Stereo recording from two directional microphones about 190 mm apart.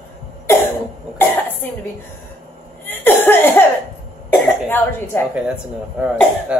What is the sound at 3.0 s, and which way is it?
Cough, 10° left (ahead or behind).